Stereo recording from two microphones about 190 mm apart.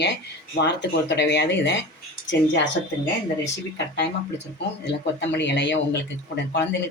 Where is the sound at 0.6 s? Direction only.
65° left (ahead or behind).